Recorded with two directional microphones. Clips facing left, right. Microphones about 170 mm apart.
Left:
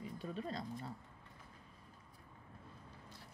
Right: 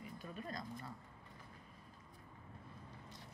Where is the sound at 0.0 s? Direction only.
30° left (ahead or behind).